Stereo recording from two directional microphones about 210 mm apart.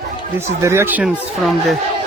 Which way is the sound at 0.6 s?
15° right (ahead or behind).